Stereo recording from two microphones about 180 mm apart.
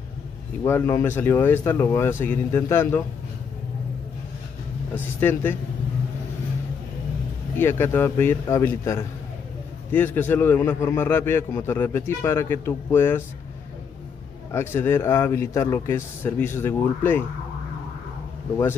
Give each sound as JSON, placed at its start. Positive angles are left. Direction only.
{"t": 0.7, "sound": "a man's voice", "side_deg": 15}
{"t": 4.9, "sound": "a man's voice", "side_deg": 10}
{"t": 7.5, "sound": "a man's voice", "side_deg": 10}
{"t": 14.5, "sound": "a man's voice", "side_deg": 15}